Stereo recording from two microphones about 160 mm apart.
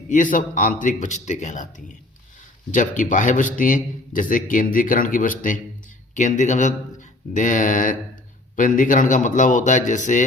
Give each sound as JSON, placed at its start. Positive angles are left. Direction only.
{"t": 0.1, "sound": "a man's voice", "side_deg": 55}